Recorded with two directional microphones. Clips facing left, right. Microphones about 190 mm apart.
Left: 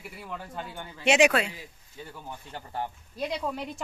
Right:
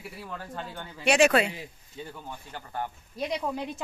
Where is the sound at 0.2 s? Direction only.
5° left (ahead or behind).